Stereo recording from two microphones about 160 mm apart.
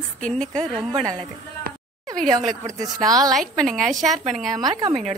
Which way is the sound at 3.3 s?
Centre (ahead or behind).